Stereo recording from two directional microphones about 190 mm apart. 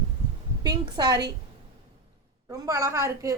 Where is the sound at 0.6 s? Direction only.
20° right (ahead or behind).